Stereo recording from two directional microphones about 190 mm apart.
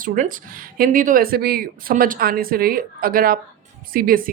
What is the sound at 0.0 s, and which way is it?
Speech, 45° right (ahead or behind).